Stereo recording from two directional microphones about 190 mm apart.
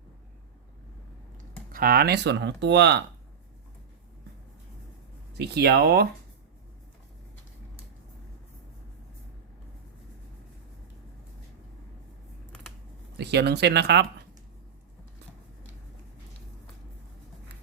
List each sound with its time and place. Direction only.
1.7 s speech: 50° right (ahead or behind)
5.4 s speech: 60° right (ahead or behind)
13.1 s speech: 60° right (ahead or behind)